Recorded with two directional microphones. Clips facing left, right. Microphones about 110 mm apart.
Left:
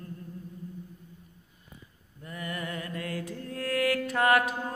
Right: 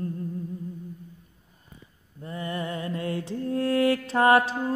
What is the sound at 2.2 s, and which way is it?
Mantra, 25° right (ahead or behind).